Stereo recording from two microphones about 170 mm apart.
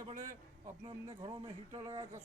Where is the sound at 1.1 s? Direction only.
30° right (ahead or behind).